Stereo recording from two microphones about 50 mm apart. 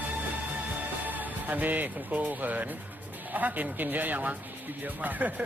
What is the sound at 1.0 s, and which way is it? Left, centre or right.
Speech, right.